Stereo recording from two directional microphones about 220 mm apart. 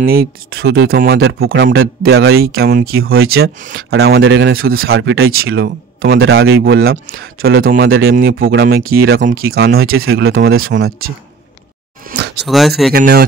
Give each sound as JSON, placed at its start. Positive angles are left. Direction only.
{"t": 0.0, "sound": "speech", "side_deg": -45}
{"t": 12.1, "sound": "a sound", "side_deg": -40}
{"t": 12.4, "sound": "speech", "side_deg": 0}
{"t": 12.9, "sound": "speech", "side_deg": -45}